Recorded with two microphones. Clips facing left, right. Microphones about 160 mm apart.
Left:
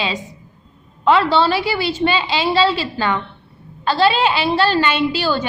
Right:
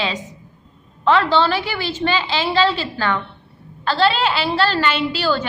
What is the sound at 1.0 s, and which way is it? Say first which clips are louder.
A woman's voice: left 1 dB; 10° left (ahead or behind).